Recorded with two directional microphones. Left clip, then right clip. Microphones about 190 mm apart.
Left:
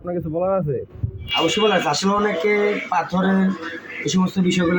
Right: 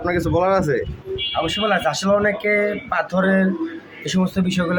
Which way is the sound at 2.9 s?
10° right (ahead or behind).